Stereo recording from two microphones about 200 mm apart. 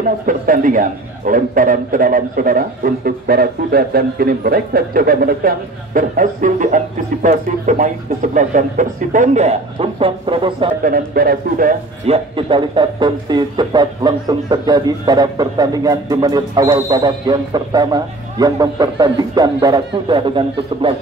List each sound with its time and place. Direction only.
0.3 s a man's voice: 45° right (ahead or behind); by 10.7 s 25° right (ahead or behind)
10.8 s a man's voice: 45° right (ahead or behind)
12.1 s a man's voice: 25° right (ahead or behind)